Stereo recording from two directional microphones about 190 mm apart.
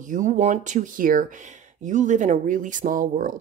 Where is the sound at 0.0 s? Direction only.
40° right (ahead or behind).